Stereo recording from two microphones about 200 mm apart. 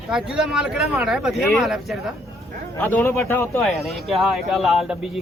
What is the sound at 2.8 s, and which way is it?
Speech, 10° left (ahead or behind).